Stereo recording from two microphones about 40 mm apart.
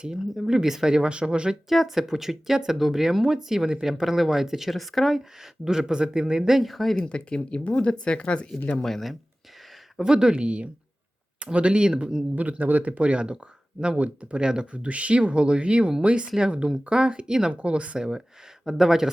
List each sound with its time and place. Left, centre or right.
0.4 s speech: centre
5.6 s speech: centre
6.6 s speech: centre
7.0 s speech: left
8.8 s speech: centre
10.0 s speech: right
12.4 s speech: right
14.4 s speech: right
18.6 s speech: centre